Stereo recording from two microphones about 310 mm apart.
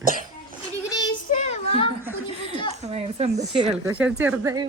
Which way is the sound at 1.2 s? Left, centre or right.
Left.